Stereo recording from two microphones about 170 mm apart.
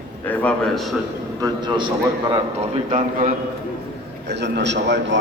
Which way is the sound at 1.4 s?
25° right (ahead or behind).